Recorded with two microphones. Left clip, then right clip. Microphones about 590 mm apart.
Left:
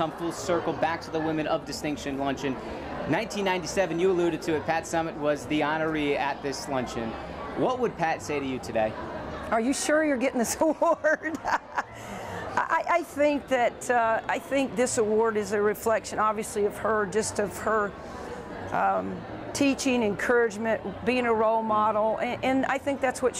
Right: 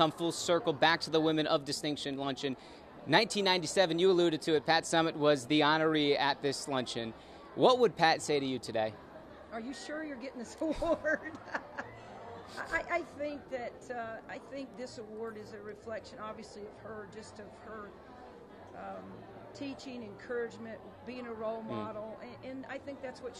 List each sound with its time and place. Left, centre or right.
0.0 s speech: right
9.6 s speech: left